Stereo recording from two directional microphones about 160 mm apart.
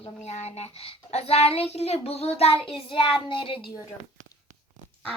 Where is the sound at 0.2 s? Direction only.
45° left (ahead or behind).